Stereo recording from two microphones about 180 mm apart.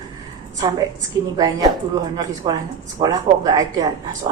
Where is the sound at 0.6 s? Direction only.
20° right (ahead or behind).